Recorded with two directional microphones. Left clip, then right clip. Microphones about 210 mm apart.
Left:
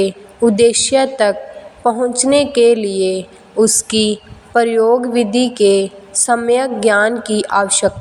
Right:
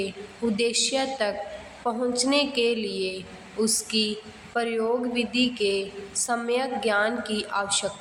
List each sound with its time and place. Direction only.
0.5 s a woman's voice: 35° left (ahead or behind)